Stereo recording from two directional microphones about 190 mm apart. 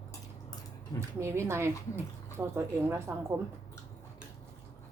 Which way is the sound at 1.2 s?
15° right (ahead or behind).